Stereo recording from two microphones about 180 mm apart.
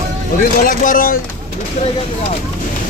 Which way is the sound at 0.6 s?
50° left (ahead or behind).